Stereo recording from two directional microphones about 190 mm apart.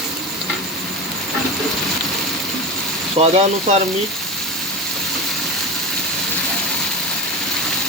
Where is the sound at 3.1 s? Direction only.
30° right (ahead or behind).